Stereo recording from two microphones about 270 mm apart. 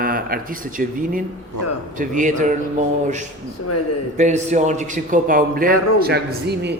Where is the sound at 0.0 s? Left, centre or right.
Right.